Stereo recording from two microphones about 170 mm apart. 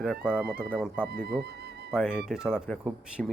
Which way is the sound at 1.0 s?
70° right (ahead or behind).